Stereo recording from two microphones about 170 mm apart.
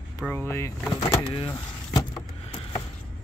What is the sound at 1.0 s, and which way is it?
Speech, 30° left (ahead or behind).